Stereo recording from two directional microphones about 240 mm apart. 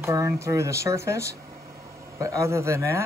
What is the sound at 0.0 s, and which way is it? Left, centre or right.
A man's voice, centre.